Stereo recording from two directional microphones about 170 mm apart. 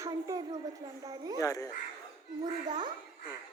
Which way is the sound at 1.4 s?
20° left (ahead or behind).